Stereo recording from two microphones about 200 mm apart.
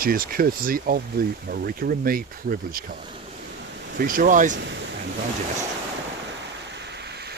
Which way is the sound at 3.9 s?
45° right (ahead or behind).